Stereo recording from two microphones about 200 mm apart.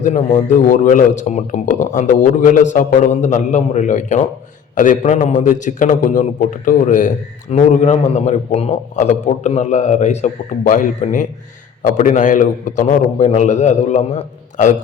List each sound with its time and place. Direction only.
0.0 s a man's voice: 35° left (ahead or behind)